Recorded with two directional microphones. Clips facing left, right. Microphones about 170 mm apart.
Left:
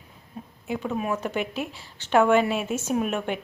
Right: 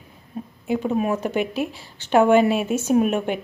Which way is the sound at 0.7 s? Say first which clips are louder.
Right 6 dB; 30° right (ahead or behind).